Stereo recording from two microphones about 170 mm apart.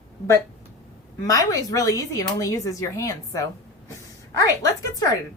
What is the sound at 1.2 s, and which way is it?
A woman's voice, 20° left (ahead or behind).